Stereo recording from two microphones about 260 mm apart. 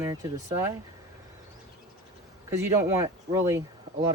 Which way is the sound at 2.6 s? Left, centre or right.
Centre.